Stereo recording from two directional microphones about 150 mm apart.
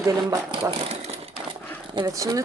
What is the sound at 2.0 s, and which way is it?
Speech, 25° right (ahead or behind).